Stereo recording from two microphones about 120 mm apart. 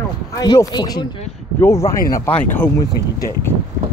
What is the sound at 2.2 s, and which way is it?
Speech, 15° left (ahead or behind).